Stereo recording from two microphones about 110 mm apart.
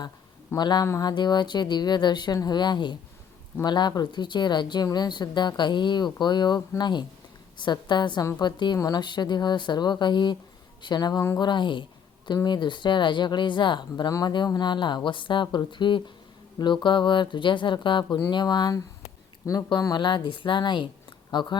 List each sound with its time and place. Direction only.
0.5 s speech: 40° left (ahead or behind)